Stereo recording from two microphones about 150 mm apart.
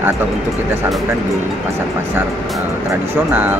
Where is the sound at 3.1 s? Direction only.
15° right (ahead or behind).